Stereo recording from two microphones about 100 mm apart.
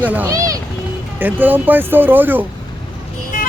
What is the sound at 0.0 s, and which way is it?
Speech, 15° right (ahead or behind).